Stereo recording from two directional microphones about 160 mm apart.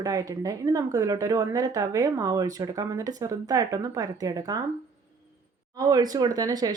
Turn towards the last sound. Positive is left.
turn(degrees=-20)  # may be behind; listen again after turning